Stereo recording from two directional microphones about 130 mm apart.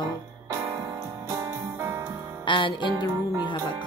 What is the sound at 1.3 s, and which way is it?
Music, 25° right (ahead or behind).